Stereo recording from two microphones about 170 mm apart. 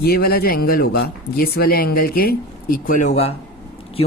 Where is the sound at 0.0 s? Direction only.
65° left (ahead or behind).